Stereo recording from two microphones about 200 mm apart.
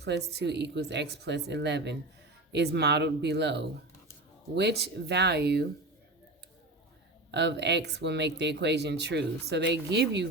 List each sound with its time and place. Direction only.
0.0 s speech: 55° right (ahead or behind)
7.3 s speech: 60° right (ahead or behind)